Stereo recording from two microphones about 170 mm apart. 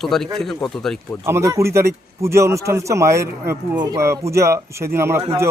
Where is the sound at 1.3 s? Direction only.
15° right (ahead or behind).